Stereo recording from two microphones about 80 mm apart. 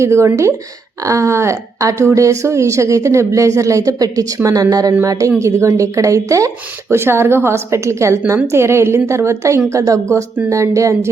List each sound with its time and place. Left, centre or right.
0.0 s a woman's voice: right
5.4 s a woman's voice: right
6.9 s a woman's voice: right